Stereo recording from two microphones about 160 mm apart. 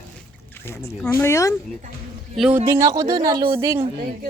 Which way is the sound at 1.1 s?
20° left (ahead or behind).